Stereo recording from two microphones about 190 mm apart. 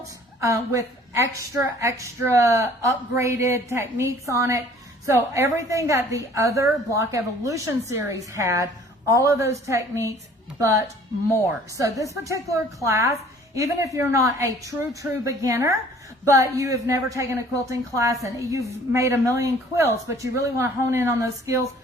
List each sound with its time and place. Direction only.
0.3 s a woman's voice: 15° right (ahead or behind)